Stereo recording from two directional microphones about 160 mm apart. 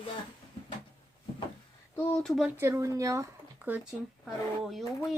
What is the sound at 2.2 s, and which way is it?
Speech, centre (ahead or behind).